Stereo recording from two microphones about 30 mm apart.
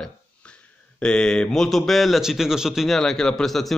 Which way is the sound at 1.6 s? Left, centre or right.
Centre.